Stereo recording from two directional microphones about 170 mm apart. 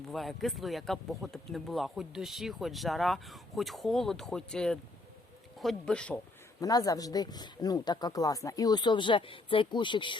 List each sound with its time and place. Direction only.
0.1 s speech: centre (ahead or behind)
6.6 s speech: 20° left (ahead or behind)